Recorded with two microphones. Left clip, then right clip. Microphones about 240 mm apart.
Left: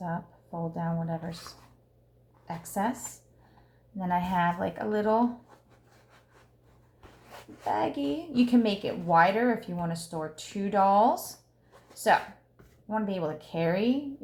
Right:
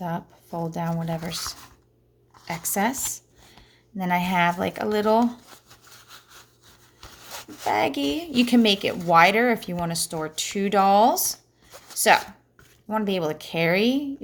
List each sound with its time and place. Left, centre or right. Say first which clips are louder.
0.7 s speech: right 3 dB; right
7.6 s speech: right 6 dB; right